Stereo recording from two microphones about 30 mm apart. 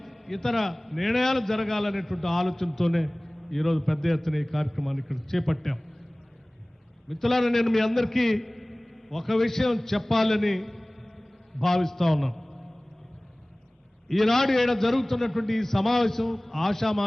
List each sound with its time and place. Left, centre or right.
0.0 s a man's voice: centre
7.1 s a man's voice: centre
14.1 s a man's voice: centre